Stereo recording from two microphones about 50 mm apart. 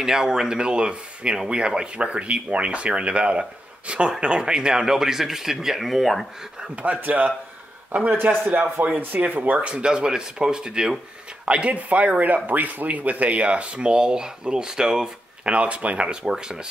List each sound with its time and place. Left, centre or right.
0.0 s speech: centre
6.7 s a man's voice: right
8.3 s speech: right; by 15.5 s centre
15.5 s speech: right